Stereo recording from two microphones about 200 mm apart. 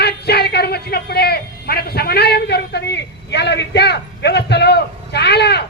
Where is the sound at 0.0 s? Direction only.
55° left (ahead or behind).